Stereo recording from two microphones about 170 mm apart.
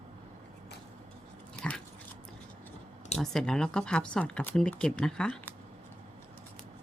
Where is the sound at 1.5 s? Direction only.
5° left (ahead or behind).